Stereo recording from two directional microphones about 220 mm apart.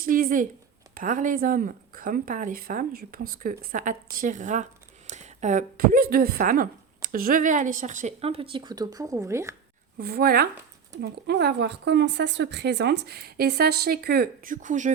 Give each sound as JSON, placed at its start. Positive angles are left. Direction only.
{"t": 0.0, "sound": "a woman's voice", "side_deg": -40}
{"t": 10.0, "sound": "speech", "side_deg": -45}